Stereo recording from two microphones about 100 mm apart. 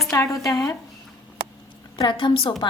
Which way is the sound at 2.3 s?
70° left (ahead or behind).